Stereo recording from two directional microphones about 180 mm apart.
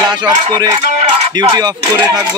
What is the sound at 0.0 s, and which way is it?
Chicken, 25° right (ahead or behind).